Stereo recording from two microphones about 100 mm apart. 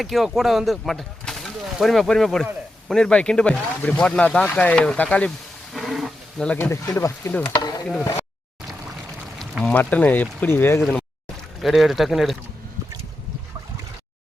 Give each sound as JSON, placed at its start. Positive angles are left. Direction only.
{"t": 0.0, "sound": "speech", "side_deg": 0}
{"t": 5.7, "sound": "wild animals", "side_deg": 0}
{"t": 6.6, "sound": "speech", "side_deg": 25}
{"t": 7.4, "sound": "speech", "side_deg": 45}
{"t": 9.4, "sound": "a sound", "side_deg": 0}
{"t": 9.7, "sound": "speech", "side_deg": 15}
{"t": 11.6, "sound": "speech", "side_deg": 0}